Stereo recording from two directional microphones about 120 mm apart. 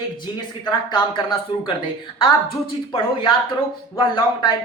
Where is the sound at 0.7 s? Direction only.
40° left (ahead or behind).